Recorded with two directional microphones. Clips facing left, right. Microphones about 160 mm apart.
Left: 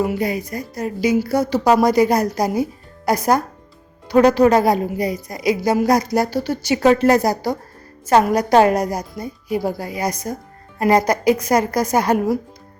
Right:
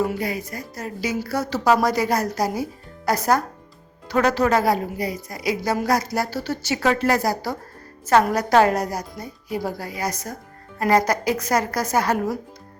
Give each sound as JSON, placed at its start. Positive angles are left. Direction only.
{"t": 0.0, "sound": "a woman's voice", "side_deg": 15}